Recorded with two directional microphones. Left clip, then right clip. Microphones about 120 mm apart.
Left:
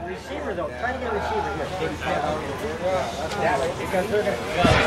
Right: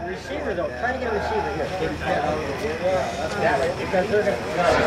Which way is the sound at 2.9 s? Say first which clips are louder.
Right 1 dB; 20° right (ahead or behind).